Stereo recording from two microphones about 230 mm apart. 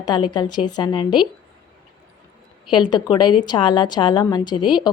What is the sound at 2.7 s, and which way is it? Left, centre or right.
A woman's voice, centre.